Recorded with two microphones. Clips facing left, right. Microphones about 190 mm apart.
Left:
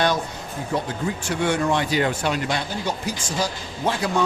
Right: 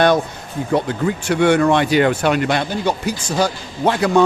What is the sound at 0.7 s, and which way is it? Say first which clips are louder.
Speech: right 7 dB; 65° right (ahead or behind).